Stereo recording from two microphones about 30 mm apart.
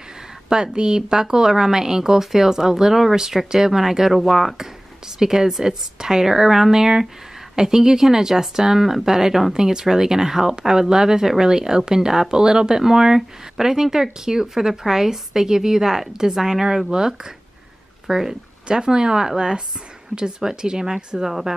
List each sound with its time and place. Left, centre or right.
0.5 s speech: right
18.7 s speech: right